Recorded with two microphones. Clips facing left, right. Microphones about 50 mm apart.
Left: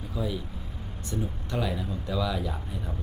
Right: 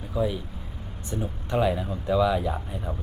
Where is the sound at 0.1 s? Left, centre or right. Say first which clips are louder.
Right 6 dB; centre.